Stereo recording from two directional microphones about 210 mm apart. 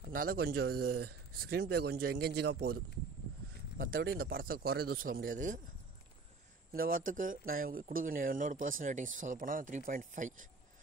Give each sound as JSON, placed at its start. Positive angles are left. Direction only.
{"t": 0.0, "sound": "speech", "side_deg": -45}
{"t": 6.7, "sound": "speech", "side_deg": -45}